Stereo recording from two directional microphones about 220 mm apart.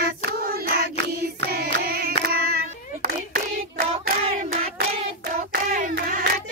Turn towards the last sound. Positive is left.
turn(degrees=-35)  # may be behind; listen again after turning